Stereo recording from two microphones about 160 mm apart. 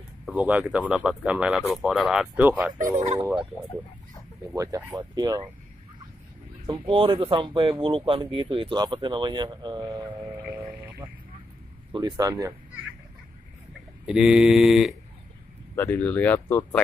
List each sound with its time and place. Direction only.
0.3 s speech: 10° right (ahead or behind)
4.6 s speech: 25° right (ahead or behind)
6.6 s speech: 30° right (ahead or behind)
11.9 s speech: 25° right (ahead or behind)
14.0 s speech: 5° right (ahead or behind)
15.7 s speech: 10° left (ahead or behind)